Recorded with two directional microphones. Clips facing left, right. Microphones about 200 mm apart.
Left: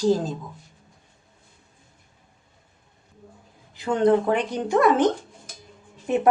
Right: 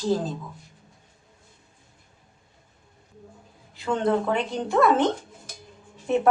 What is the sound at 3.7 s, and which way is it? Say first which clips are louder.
A woman's voice: left 4 dB; 15° left (ahead or behind).